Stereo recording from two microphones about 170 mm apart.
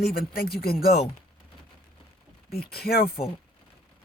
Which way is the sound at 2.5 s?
65° left (ahead or behind).